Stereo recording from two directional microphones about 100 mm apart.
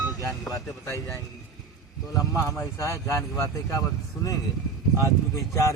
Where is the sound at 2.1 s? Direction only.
35° left (ahead or behind).